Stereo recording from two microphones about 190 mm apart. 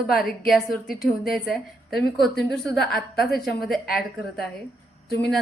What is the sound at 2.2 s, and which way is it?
A woman's voice, centre (ahead or behind).